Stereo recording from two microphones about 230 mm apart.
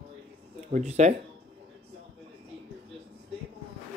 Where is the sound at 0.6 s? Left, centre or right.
Right.